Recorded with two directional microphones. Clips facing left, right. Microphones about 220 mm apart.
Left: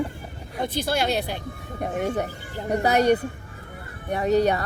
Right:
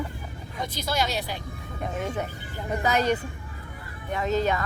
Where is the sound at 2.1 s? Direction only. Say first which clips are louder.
Left 4 dB; 35° left (ahead or behind).